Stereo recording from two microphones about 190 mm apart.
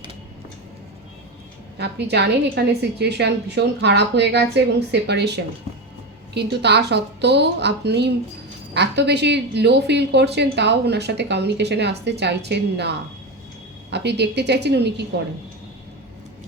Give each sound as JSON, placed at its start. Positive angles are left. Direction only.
{"t": 1.8, "sound": "speech", "side_deg": -60}
{"t": 13.9, "sound": "speech", "side_deg": -60}